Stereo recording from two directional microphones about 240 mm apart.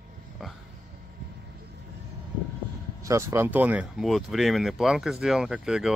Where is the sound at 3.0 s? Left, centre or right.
Centre.